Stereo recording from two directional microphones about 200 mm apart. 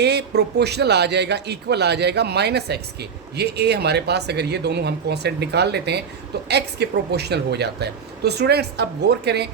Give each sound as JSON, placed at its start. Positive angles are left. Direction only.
{"t": 0.0, "sound": "speech", "side_deg": -55}